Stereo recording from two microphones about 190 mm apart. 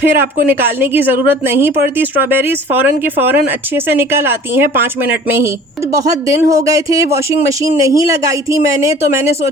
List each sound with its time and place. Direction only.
0.0 s a woman's voice: 10° right (ahead or behind)
5.9 s a woman's voice: 15° right (ahead or behind)